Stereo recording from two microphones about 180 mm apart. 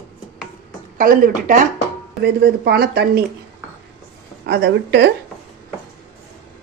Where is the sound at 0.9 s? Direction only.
50° right (ahead or behind).